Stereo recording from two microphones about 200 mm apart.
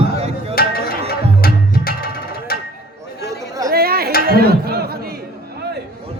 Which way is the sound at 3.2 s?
15° right (ahead or behind).